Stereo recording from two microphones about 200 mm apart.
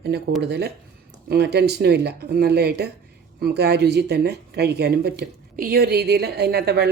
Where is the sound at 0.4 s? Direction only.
55° right (ahead or behind).